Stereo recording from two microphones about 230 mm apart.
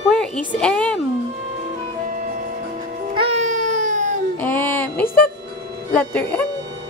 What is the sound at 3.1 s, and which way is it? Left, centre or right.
Baby cry, right.